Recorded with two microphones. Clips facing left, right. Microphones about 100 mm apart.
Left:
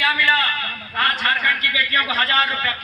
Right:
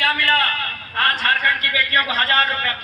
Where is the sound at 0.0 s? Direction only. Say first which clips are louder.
Even; 45° right (ahead or behind).